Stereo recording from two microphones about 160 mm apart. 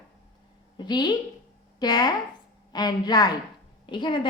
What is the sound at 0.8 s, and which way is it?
A woman's voice, 25° left (ahead or behind).